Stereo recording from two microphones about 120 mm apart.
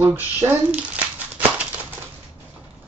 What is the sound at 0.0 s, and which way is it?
Speech, 15° right (ahead or behind).